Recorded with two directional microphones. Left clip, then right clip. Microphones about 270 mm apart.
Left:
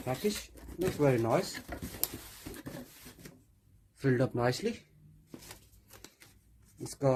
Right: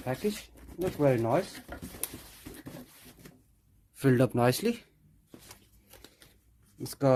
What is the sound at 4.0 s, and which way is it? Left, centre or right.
Speech, right.